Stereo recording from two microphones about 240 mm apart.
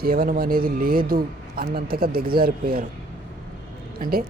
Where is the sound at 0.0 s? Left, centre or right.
Right.